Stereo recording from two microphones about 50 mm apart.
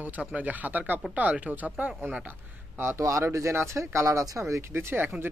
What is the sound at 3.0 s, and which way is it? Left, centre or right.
Speech, right.